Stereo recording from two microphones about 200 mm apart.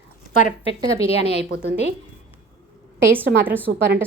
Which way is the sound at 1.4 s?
60° right (ahead or behind).